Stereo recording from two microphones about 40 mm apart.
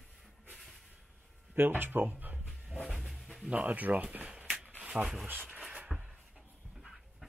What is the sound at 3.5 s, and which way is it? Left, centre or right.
Speech, right.